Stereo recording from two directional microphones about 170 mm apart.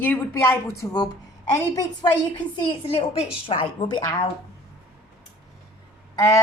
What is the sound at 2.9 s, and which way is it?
A woman's voice, 35° left (ahead or behind).